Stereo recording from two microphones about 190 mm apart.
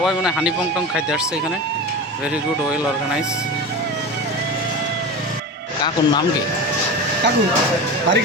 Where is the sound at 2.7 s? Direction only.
5° right (ahead or behind).